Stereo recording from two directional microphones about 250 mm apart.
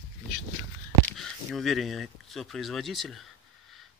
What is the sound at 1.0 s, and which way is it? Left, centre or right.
Speech, centre.